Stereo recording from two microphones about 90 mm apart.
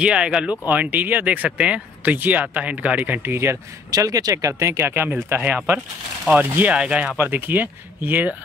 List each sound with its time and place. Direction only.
0.0 s speech: 10° right (ahead or behind); by 3.5 s 25° right (ahead or behind)
3.9 s speech: 40° right (ahead or behind); by 6.7 s 25° right (ahead or behind)
6.7 s speech: 15° right (ahead or behind)